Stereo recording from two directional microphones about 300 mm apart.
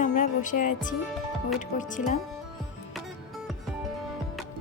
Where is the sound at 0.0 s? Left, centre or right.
Left.